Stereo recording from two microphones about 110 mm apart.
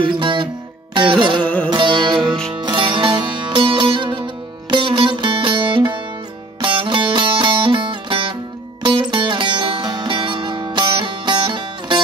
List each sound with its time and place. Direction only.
0.0 s music: 50° right (ahead or behind)